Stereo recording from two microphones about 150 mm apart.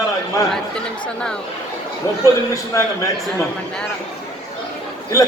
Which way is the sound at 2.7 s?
20° left (ahead or behind).